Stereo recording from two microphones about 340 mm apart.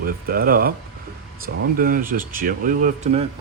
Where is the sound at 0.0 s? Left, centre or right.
Right.